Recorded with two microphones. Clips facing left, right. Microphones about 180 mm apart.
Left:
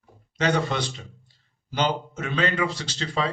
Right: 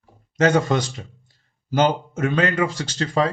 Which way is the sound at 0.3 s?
45° right (ahead or behind).